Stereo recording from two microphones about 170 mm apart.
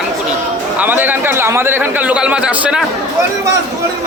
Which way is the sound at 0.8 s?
10° right (ahead or behind).